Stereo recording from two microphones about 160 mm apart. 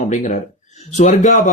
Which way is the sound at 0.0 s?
50° left (ahead or behind).